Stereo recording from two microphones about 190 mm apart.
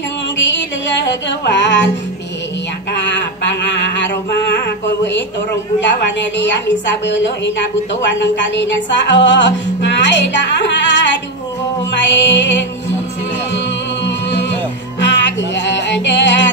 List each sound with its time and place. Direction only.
0.4 s music: 70° left (ahead or behind)
3.0 s a sound: 65° left (ahead or behind)
5.9 s music: 70° left (ahead or behind)
8.0 s music: 70° left (ahead or behind)
14.0 s music: 70° left (ahead or behind)